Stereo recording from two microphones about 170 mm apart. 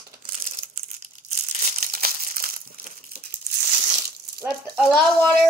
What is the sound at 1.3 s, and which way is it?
Crumpling, 50° right (ahead or behind).